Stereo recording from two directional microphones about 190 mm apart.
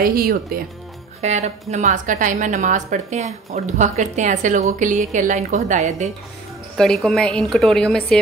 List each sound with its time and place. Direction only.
0.0 s speech: 50° right (ahead or behind)
1.2 s a woman's voice: 35° right (ahead or behind)
6.8 s a woman's voice: centre (ahead or behind)